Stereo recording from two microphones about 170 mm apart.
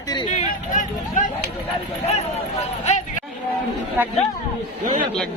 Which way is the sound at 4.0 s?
10° right (ahead or behind).